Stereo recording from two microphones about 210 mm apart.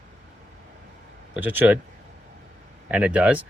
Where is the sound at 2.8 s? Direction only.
5° right (ahead or behind).